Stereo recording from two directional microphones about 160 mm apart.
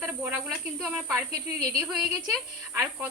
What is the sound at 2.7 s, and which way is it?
Speech, 15° right (ahead or behind).